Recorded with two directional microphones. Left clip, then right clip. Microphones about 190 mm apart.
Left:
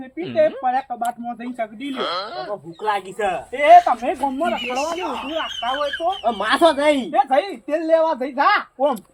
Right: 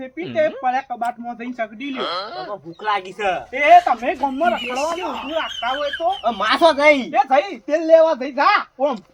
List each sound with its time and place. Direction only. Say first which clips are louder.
0.2 s speech: left 1 dB; centre (ahead or behind)
2.8 s speech: right 1 dB; 10° right (ahead or behind)
3.5 s speech: left 1 dB; 5° left (ahead or behind)
6.4 s speech: right 2 dB; 15° right (ahead or behind)
7.1 s speech: right 1 dB; centre (ahead or behind)